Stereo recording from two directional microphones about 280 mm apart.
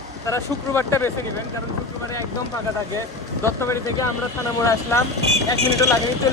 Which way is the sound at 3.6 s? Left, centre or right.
Centre.